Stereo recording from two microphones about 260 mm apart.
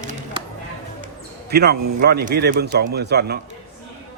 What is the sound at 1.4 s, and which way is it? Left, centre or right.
A man's voice, right.